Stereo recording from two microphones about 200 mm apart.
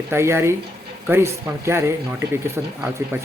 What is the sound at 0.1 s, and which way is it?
Speech, 10° right (ahead or behind).